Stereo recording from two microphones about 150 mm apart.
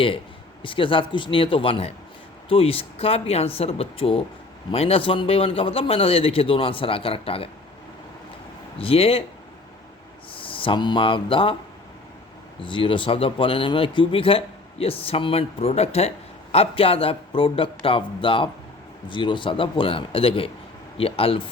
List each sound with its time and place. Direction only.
0.6 s speech: 35° left (ahead or behind)
8.8 s speech: 40° left (ahead or behind)
10.3 s speech: 35° left (ahead or behind)
12.6 s speech: 35° left (ahead or behind)